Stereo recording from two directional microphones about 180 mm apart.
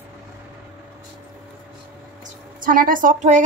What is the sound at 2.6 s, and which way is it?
Speech, 50° right (ahead or behind).